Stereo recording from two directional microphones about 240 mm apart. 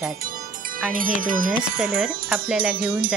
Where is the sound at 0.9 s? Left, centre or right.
Right.